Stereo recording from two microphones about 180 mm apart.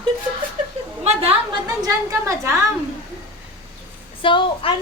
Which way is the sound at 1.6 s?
20° right (ahead or behind).